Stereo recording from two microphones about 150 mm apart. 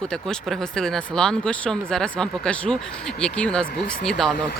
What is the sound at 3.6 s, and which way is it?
Speech, 75° left (ahead or behind).